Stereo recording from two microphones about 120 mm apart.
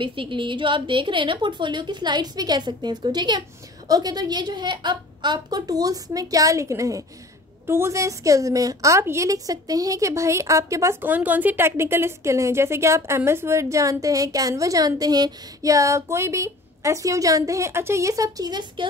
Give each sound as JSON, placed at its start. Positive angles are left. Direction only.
{"t": 0.0, "sound": "a woman's voice", "side_deg": -45}